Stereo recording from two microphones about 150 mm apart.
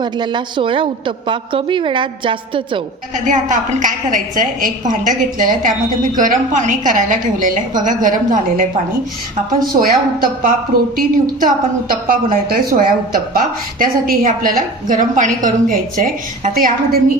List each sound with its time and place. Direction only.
0.0 s a woman's voice: 30° right (ahead or behind)
3.2 s a woman's voice: 55° right (ahead or behind)
9.8 s a woman's voice: 75° right (ahead or behind)